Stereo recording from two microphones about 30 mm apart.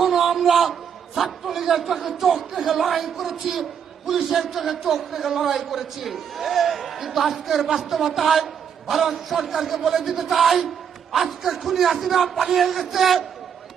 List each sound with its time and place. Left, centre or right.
0.0 s a man's voice: centre